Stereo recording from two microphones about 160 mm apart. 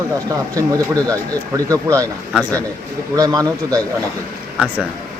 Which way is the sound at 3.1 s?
20° right (ahead or behind).